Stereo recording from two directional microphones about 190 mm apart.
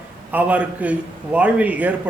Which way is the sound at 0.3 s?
5° right (ahead or behind).